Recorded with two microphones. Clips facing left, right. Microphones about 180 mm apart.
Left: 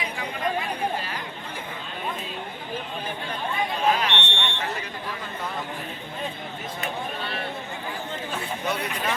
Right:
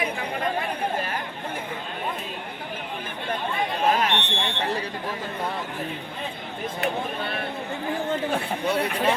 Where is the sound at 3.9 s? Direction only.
45° right (ahead or behind).